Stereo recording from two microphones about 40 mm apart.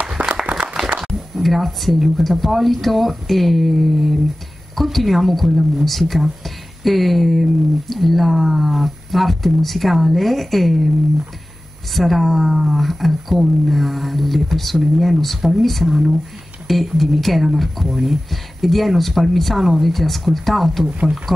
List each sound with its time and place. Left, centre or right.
0.0 s applause: right
0.8 s a sound: centre
1.3 s speech: centre
11.9 s speech: centre